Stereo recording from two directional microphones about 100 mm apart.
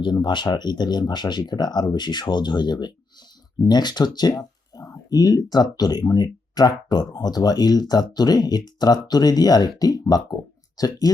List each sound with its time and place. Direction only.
0.0 s speech: 50° left (ahead or behind)